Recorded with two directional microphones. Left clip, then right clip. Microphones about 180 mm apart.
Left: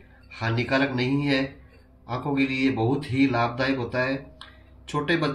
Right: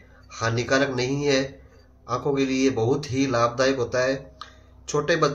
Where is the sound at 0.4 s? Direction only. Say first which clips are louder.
Right 2 dB; 45° right (ahead or behind).